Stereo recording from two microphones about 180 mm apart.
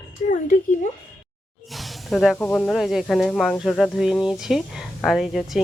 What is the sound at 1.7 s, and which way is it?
Speech, centre (ahead or behind).